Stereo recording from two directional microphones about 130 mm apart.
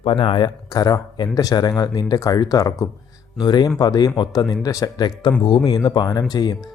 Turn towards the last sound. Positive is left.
turn(degrees=30)  # may be behind; listen again after turning